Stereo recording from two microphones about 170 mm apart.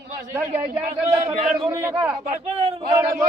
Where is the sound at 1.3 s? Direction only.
45° right (ahead or behind).